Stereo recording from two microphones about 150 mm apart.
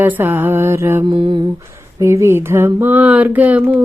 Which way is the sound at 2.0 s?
20° right (ahead or behind).